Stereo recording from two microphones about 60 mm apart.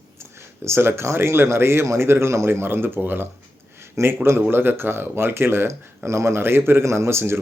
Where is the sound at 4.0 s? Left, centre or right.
Right.